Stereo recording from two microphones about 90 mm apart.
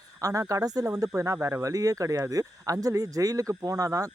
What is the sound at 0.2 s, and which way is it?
Speech, 40° right (ahead or behind).